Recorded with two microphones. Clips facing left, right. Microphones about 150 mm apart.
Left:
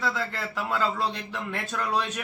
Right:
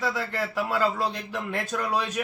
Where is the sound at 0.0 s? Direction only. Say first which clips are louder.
Right 2 dB; 10° right (ahead or behind).